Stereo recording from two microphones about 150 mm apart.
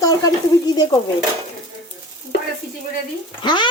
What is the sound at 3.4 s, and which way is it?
Stir, 30° left (ahead or behind).